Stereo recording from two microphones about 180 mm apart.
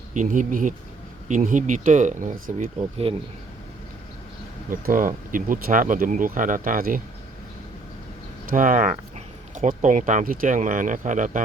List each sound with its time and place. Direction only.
0.1 s speech: 45° right (ahead or behind)
4.7 s speech: 50° right (ahead or behind)
8.4 s speech: 50° right (ahead or behind)